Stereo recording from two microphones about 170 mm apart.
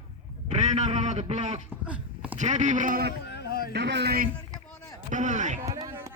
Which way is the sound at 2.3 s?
45° right (ahead or behind).